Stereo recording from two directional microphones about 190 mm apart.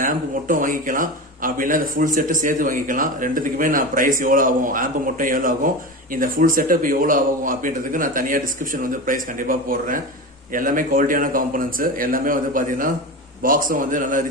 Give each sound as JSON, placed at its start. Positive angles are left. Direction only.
{"t": 0.0, "sound": "speech", "side_deg": -45}